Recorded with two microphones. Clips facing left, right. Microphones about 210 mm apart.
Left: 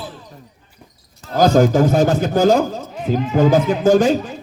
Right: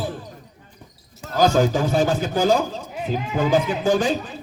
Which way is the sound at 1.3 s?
40° left (ahead or behind).